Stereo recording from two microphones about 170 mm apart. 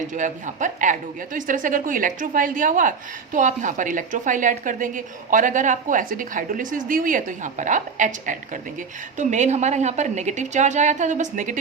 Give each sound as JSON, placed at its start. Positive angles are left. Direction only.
{"t": 0.1, "sound": "a woman's voice", "side_deg": -45}